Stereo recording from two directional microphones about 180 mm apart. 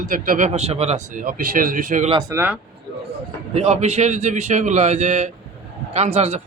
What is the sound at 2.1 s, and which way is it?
Speech, 20° right (ahead or behind).